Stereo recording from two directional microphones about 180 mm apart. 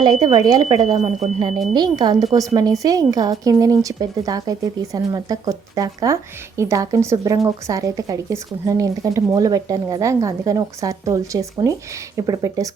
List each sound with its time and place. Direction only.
0.0 s speech: 25° right (ahead or behind)
0.9 s speech: 35° right (ahead or behind)